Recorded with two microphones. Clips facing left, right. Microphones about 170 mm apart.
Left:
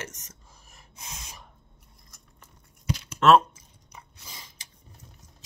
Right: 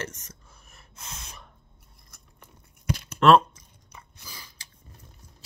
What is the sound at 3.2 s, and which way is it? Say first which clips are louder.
Chewing: right 1 dB; 5° left (ahead or behind).